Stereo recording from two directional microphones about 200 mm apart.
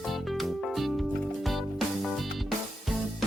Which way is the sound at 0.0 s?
Centre (ahead or behind).